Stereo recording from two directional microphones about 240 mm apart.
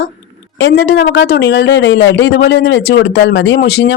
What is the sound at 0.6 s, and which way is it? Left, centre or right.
A man's voice, left.